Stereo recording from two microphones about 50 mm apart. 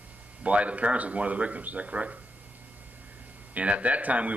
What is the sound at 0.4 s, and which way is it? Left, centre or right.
Speech, right.